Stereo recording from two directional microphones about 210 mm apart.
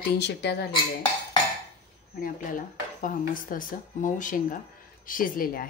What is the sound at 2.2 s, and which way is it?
Speech, 40° left (ahead or behind).